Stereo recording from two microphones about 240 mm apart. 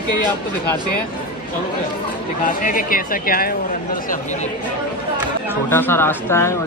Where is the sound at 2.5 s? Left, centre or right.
Left.